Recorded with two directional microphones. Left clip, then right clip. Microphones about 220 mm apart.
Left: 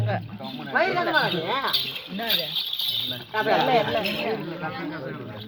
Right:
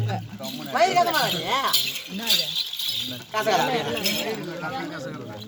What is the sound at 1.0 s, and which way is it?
Speech, 25° right (ahead or behind).